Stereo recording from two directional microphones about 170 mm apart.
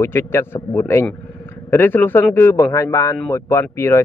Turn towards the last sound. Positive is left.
turn(degrees=15)  # may be behind; listen again after turning